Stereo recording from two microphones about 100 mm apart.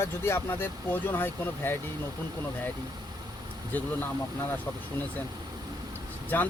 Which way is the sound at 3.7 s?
20° left (ahead or behind).